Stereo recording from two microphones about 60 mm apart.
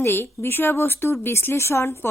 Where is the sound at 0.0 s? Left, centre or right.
Left.